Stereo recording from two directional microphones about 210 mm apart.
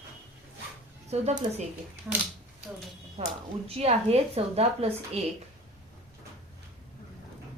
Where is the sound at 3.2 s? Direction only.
30° right (ahead or behind).